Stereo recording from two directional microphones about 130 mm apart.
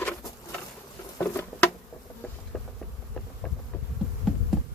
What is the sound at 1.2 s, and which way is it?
Patter, 15° left (ahead or behind).